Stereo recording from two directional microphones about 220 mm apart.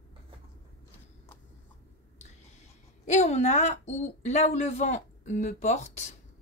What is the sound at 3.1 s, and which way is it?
Speech, 30° left (ahead or behind).